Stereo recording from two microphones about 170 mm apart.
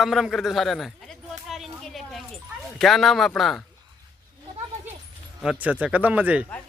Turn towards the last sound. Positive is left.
turn(degrees=-10)  # may be behind; listen again after turning